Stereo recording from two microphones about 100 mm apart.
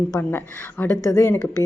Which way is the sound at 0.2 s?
20° left (ahead or behind).